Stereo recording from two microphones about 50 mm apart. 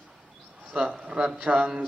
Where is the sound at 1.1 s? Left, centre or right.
Centre.